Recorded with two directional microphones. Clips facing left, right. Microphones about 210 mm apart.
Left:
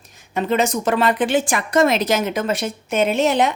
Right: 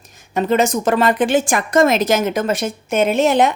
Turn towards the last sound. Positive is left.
turn(degrees=-50)  # may be behind; listen again after turning